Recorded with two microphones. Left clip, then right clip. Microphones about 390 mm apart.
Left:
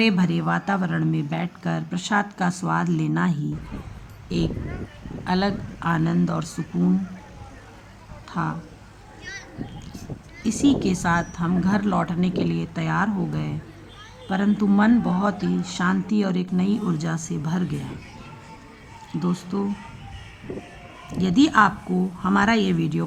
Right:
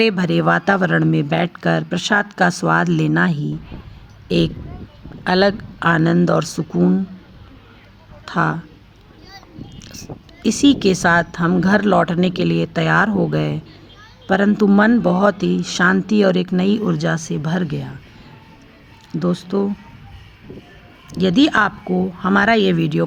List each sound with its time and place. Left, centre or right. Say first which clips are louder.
0.0 s speech: right 7 dB; centre
8.2 s speech: right 9 dB; centre
10.4 s speech: right 7 dB; centre
19.2 s speech: right 8 dB; centre
21.2 s speech: right 3 dB; centre